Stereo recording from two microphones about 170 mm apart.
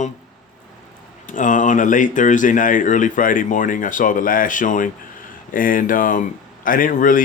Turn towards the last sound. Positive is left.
turn(degrees=50)  # may be behind; listen again after turning